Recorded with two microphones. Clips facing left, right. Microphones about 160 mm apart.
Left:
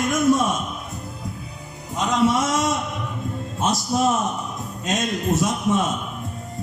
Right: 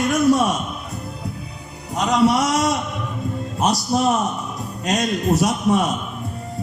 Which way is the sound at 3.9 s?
65° right (ahead or behind).